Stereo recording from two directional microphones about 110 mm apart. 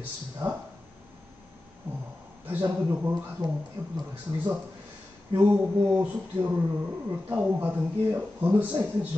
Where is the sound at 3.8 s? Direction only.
15° right (ahead or behind).